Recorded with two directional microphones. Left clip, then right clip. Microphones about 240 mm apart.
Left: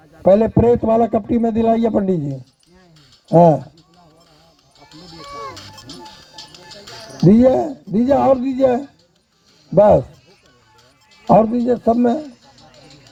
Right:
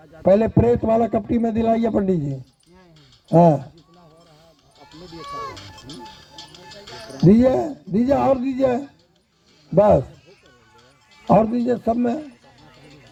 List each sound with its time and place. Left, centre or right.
0.3 s a man's voice: left
4.9 s music: left
7.9 s a man's voice: left
11.3 s speech: left